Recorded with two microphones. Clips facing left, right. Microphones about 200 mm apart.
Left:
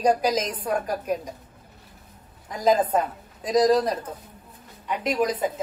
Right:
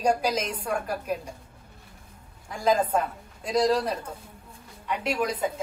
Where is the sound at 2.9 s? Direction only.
10° right (ahead or behind).